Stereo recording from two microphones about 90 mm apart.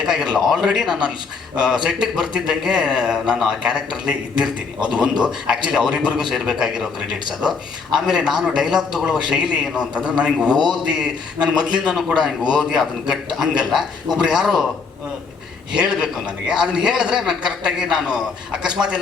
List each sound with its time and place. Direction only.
0.0 s a man's voice: 5° right (ahead or behind)
15.7 s a man's voice: 10° right (ahead or behind)